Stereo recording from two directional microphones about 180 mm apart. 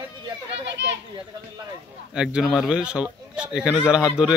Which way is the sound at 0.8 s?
75° right (ahead or behind).